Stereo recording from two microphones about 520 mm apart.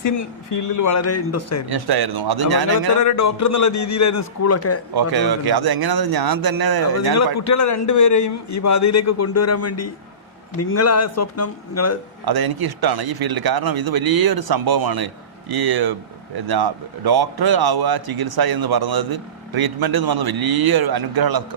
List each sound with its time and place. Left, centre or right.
0.0 s a man's voice: left
1.7 s a man's voice: right
3.0 s a man's voice: left
4.9 s a man's voice: right
7.3 s a man's voice: left
12.2 s a man's voice: right